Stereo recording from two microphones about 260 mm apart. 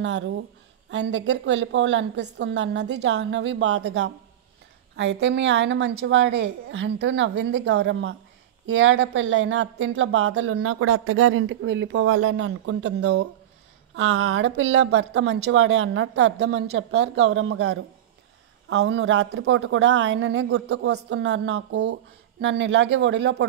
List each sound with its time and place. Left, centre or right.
0.0 s speech: right